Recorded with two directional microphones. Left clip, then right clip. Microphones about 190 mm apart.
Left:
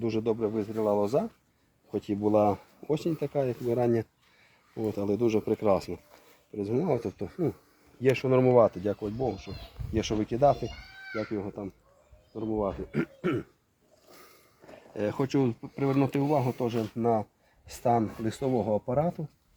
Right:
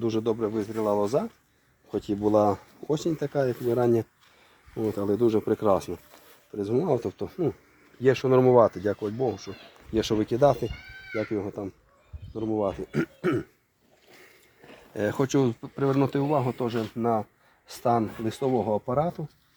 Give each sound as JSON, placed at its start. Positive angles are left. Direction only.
{"t": 0.0, "sound": "speech", "side_deg": -25}
{"t": 6.6, "sound": "speech", "side_deg": -20}
{"t": 9.9, "sound": "speech", "side_deg": -50}
{"t": 14.9, "sound": "speech", "side_deg": -55}
{"t": 15.3, "sound": "speech", "side_deg": -35}
{"t": 16.7, "sound": "speech", "side_deg": -15}
{"t": 17.0, "sound": "speech", "side_deg": 5}